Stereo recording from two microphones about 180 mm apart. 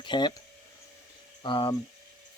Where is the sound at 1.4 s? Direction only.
25° left (ahead or behind).